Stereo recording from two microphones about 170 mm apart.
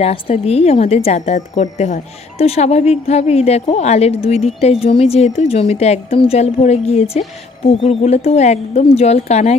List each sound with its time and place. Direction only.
0.0 s speech: 35° left (ahead or behind)